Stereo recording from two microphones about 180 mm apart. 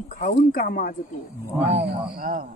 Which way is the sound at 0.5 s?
55° left (ahead or behind).